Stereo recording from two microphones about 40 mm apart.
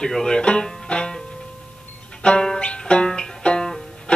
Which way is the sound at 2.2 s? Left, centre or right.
Left.